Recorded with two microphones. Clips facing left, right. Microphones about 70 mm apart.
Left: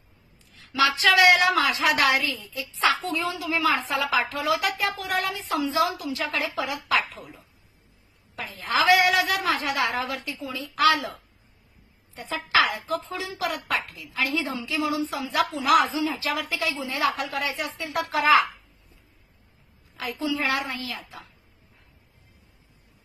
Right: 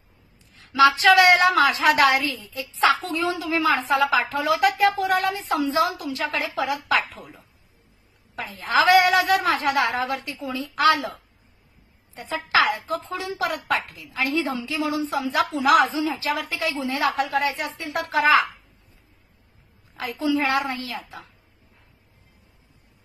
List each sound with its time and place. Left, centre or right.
1.1 s a woman's voice: right
8.4 s a woman's voice: right
12.3 s a woman's voice: right
20.0 s a woman's voice: right